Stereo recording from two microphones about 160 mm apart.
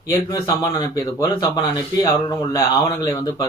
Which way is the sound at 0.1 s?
20° left (ahead or behind).